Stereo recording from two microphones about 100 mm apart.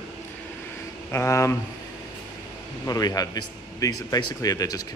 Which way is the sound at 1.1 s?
30° left (ahead or behind).